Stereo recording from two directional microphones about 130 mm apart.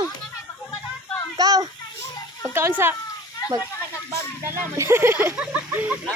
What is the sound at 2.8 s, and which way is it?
Speech, 20° right (ahead or behind).